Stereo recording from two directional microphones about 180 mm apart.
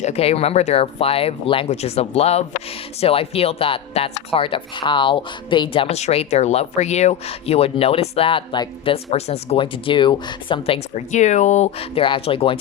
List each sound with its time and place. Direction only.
0.0 s speech: 35° left (ahead or behind)
10.9 s speech: 40° left (ahead or behind)